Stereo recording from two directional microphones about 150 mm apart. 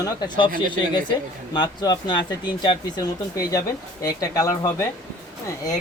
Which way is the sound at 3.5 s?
20° left (ahead or behind).